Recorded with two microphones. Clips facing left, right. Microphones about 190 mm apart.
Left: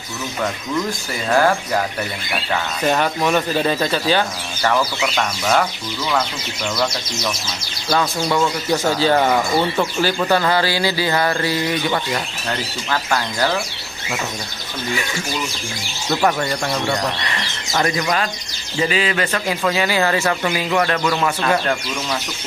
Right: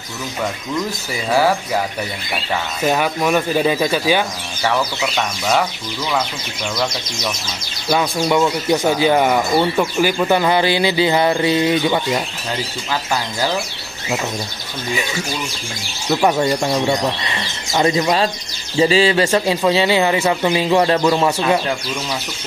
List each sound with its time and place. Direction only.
1.3 s speech: 5° right (ahead or behind)
7.9 s speech: 15° right (ahead or behind)
16.1 s a man's voice: 15° right (ahead or behind)
21.4 s speech: 10° right (ahead or behind)